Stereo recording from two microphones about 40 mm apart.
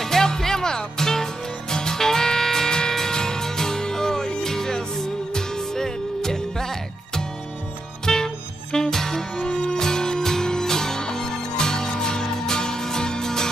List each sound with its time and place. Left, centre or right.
0.0 s music: centre